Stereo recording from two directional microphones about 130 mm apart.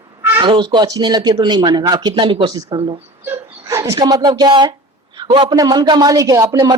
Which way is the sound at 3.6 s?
25° right (ahead or behind).